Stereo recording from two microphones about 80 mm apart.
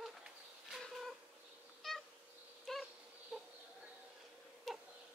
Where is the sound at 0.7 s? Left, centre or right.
Centre.